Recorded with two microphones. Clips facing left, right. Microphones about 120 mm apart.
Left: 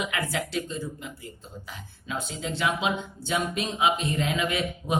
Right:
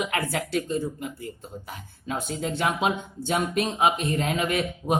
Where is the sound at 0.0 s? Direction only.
50° right (ahead or behind).